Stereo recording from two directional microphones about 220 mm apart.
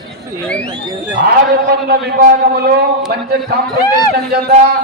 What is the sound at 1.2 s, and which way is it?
A man's voice, 45° right (ahead or behind).